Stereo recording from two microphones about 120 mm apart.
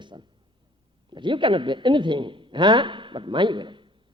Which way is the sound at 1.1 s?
40° right (ahead or behind).